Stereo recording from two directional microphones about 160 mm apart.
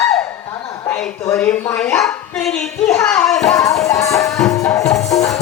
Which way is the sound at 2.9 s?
5° left (ahead or behind).